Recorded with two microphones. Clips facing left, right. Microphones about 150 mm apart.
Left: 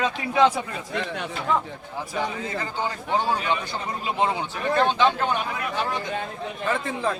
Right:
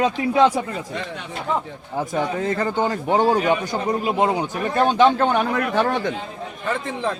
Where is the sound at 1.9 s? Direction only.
50° right (ahead or behind).